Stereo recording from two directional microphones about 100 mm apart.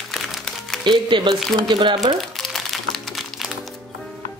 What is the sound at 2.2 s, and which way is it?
Crumpling, centre (ahead or behind).